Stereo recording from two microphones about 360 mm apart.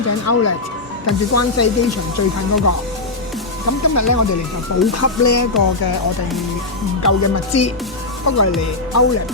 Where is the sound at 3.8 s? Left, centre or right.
Left.